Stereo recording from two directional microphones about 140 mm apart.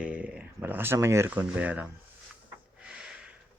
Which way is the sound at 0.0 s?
10° right (ahead or behind).